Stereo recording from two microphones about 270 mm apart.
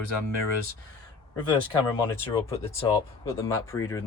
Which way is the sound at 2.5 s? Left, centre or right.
Centre.